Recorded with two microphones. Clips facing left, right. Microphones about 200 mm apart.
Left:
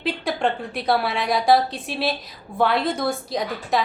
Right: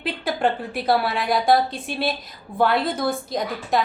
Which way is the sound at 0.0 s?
Centre (ahead or behind).